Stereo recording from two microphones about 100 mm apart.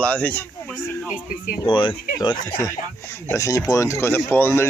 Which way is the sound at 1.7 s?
50° left (ahead or behind).